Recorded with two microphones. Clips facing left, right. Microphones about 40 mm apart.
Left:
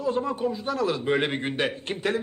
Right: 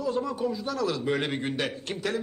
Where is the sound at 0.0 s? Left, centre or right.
Left.